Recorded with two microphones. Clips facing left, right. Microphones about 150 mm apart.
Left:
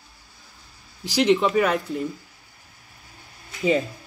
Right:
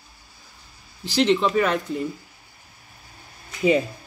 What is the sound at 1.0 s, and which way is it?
Speech, 10° left (ahead or behind).